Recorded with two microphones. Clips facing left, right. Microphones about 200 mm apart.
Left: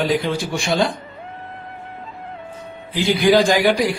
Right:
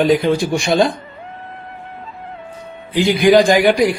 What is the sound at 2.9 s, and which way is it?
Speech, 15° right (ahead or behind).